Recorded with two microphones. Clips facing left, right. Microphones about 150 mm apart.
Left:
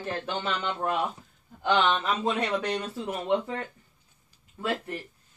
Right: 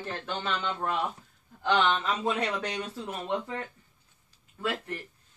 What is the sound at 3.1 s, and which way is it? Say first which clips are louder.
Speech: left 6 dB; 20° left (ahead or behind).